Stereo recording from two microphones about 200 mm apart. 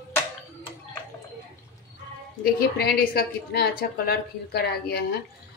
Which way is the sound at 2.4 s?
50° left (ahead or behind).